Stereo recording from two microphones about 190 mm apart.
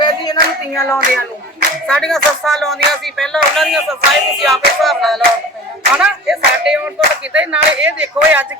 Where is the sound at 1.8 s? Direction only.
5° left (ahead or behind).